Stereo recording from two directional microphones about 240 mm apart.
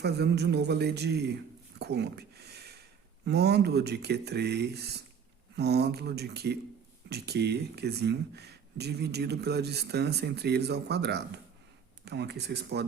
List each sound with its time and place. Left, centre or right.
0.0 s speech: right
1.8 s a sound: right
3.2 s speech: right